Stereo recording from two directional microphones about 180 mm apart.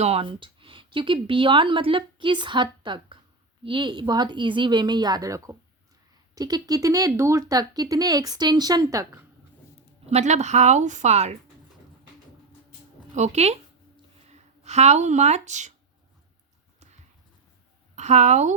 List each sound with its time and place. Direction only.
0.0 s speech: 35° right (ahead or behind)
10.1 s a woman's voice: 40° right (ahead or behind)
13.1 s a sound: 40° right (ahead or behind)
17.9 s a woman's voice: 40° right (ahead or behind)